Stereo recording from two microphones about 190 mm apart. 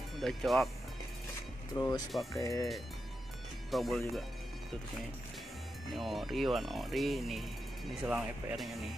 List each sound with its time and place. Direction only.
0.2 s speech: centre (ahead or behind)
1.8 s speech: 20° left (ahead or behind)
3.7 s speech: centre (ahead or behind)
5.9 s speech: centre (ahead or behind)